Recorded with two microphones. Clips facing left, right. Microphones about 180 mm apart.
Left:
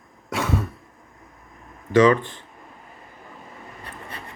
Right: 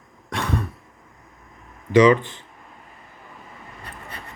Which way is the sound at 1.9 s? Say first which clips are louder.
Right 1 dB; 20° right (ahead or behind).